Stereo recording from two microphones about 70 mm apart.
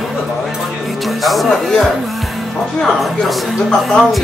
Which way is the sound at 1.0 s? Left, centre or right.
Centre.